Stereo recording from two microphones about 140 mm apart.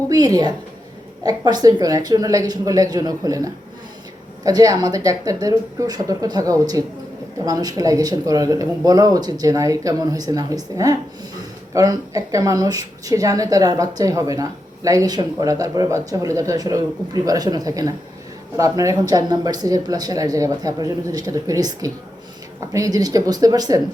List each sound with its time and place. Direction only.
0.1 s a woman's voice: 25° right (ahead or behind)